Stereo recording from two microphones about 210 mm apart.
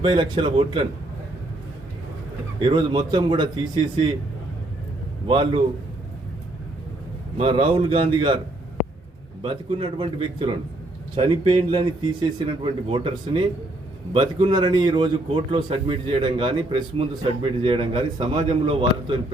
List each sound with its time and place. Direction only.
0.0 s a man's voice: 25° right (ahead or behind)
2.6 s a man's voice: 20° right (ahead or behind)
5.3 s a man's voice: 25° right (ahead or behind)
7.3 s a man's voice: 25° right (ahead or behind)
9.4 s a man's voice: 25° right (ahead or behind)